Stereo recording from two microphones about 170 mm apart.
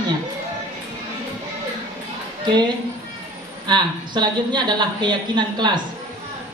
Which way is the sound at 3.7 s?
25° right (ahead or behind).